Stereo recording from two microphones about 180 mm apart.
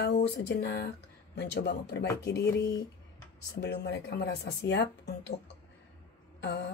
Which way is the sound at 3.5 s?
70° left (ahead or behind).